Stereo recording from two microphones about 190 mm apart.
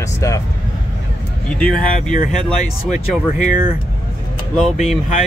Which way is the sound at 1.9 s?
45° left (ahead or behind).